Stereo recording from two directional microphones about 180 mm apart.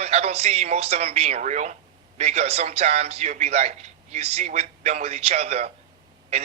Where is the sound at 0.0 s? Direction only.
35° right (ahead or behind).